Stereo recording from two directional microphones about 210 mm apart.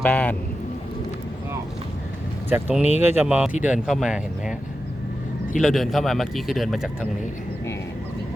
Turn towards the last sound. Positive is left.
turn(degrees=0)  # may be behind; listen again after turning